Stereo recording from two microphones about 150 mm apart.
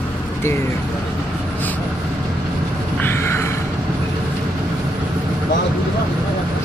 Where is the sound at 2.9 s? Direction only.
15° left (ahead or behind).